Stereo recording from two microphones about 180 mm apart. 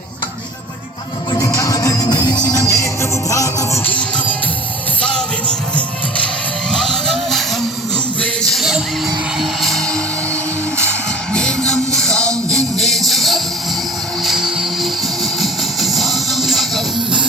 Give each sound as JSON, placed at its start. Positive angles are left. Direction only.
{"t": 1.3, "sound": "music", "side_deg": 20}
{"t": 6.7, "sound": "vehicle", "side_deg": 5}
{"t": 8.2, "sound": "a sound", "side_deg": 0}
{"t": 9.4, "sound": "music", "side_deg": 0}
{"t": 11.3, "sound": "music", "side_deg": 5}